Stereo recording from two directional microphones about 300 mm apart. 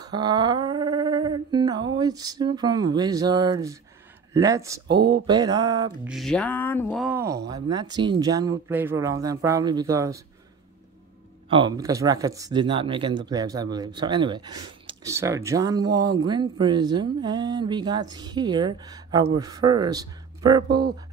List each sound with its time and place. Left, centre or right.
0.0 s speech: centre
4.8 s speech: right
5.2 s speech: centre
6.1 s a sound: centre
7.1 s speech: centre
11.4 s speech: centre
15.9 s speech: right
16.3 s speech: centre